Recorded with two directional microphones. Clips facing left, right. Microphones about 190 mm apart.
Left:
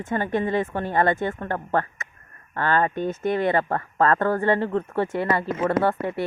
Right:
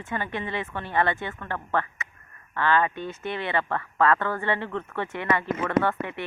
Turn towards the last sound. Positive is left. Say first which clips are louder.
# left 2 dB
turn(degrees=35)  # may be behind; listen again after turning